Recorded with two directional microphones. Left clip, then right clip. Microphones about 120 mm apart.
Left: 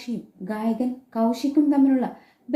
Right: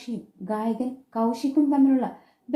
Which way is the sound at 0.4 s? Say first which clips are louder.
Left 1 dB; 25° right (ahead or behind).